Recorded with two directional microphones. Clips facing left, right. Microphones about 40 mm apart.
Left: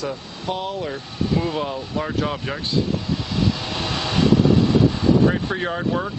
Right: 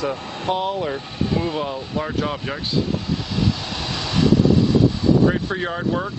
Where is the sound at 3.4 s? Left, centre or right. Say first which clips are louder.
Left 1 dB; centre.